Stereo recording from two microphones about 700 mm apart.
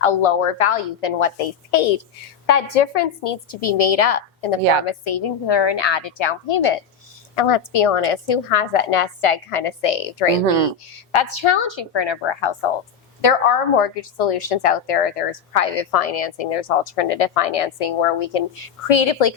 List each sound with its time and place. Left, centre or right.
0.0 s a woman's voice: left
13.2 s a woman's voice: left